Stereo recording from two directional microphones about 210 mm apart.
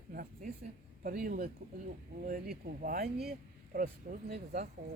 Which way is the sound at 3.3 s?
40° right (ahead or behind).